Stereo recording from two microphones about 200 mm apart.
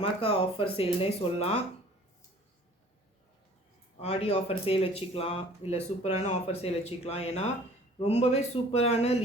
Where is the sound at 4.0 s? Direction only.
30° left (ahead or behind).